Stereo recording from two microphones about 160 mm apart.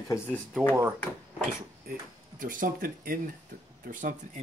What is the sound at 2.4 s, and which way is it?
Speech, 55° right (ahead or behind).